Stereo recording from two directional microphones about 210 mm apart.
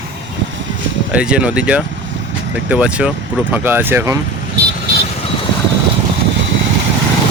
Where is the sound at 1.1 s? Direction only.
5° right (ahead or behind).